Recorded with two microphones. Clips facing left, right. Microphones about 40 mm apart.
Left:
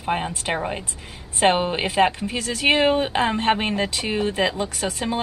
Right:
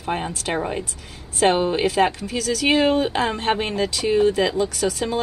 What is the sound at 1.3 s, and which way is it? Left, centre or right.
Speech, left.